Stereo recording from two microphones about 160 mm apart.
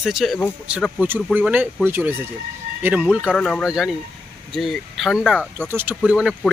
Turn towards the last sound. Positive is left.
turn(degrees=-5)  # may be behind; listen again after turning